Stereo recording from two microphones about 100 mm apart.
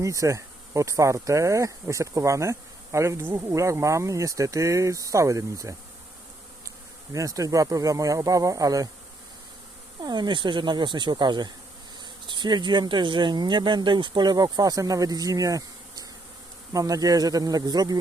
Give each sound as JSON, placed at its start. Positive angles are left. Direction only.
{"t": 0.0, "sound": "speech", "side_deg": -30}
{"t": 7.1, "sound": "speech", "side_deg": -35}
{"t": 10.0, "sound": "speech", "side_deg": -45}